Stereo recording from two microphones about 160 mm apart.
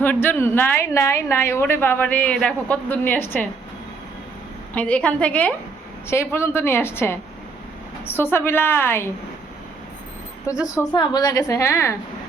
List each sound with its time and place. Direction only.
0.0 s a woman's voice: 10° left (ahead or behind)
4.7 s a woman's voice: 10° left (ahead or behind)
10.4 s a woman's voice: 20° left (ahead or behind)